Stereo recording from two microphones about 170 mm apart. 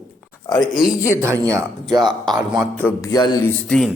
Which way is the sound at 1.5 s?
25° right (ahead or behind).